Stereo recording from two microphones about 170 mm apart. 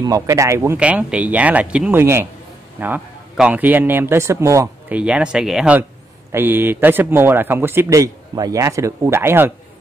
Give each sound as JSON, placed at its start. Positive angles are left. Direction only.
{"t": 0.0, "sound": "speech", "side_deg": -20}
{"t": 4.9, "sound": "speech", "side_deg": -5}